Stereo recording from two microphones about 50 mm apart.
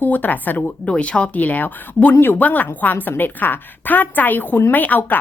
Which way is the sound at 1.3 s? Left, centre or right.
Left.